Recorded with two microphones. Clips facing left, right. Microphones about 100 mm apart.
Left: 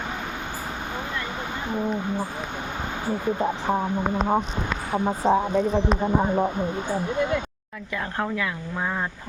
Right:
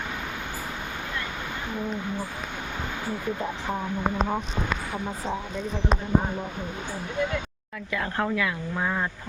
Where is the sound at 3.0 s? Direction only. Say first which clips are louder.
Left 7 dB; 25° left (ahead or behind).